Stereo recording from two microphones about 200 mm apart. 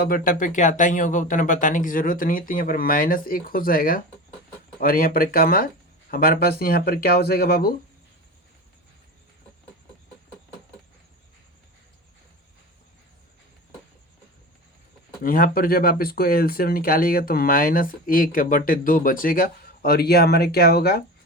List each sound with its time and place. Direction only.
0.0 s speech: 45° left (ahead or behind)
15.2 s speech: 45° left (ahead or behind)